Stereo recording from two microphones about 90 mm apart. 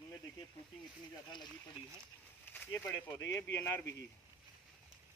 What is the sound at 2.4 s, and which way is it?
Speech, 20° left (ahead or behind).